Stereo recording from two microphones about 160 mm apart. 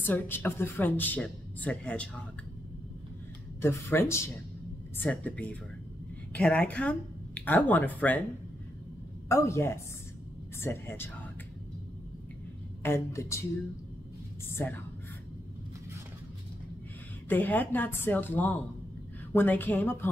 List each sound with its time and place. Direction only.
0.0 s speech: 10° left (ahead or behind)
3.6 s speech: 15° left (ahead or behind)
9.3 s speech: 20° left (ahead or behind)
12.8 s speech: 15° left (ahead or behind)
14.5 s speech: 15° left (ahead or behind)
17.3 s speech: 10° left (ahead or behind)